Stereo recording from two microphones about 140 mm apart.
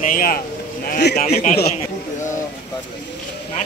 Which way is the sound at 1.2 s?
50° left (ahead or behind).